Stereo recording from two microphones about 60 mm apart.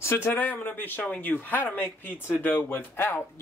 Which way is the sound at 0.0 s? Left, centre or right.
Left.